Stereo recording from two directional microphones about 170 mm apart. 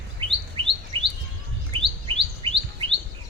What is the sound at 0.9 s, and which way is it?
Bird, 30° right (ahead or behind).